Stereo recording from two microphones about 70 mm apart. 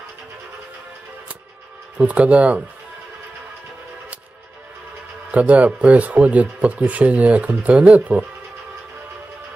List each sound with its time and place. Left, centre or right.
2.0 s speech: centre
5.3 s speech: centre